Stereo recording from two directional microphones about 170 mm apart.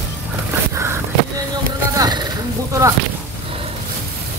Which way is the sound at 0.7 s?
15° right (ahead or behind).